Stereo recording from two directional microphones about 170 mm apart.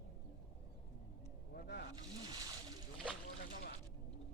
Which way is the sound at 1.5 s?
65° left (ahead or behind).